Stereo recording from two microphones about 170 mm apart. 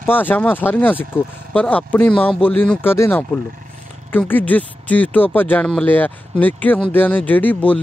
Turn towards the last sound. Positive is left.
turn(degrees=10)  # may be behind; listen again after turning